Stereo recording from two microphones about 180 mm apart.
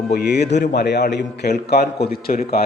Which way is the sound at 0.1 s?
65° left (ahead or behind).